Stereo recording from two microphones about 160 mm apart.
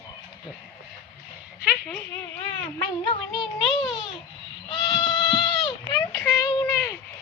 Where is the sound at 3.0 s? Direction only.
30° left (ahead or behind).